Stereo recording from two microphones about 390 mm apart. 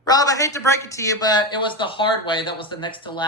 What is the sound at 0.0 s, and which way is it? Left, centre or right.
Speech, centre.